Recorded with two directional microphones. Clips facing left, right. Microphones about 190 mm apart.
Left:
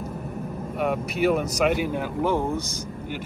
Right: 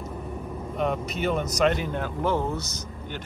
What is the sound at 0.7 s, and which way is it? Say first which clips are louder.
Speech: left 2 dB; 10° left (ahead or behind).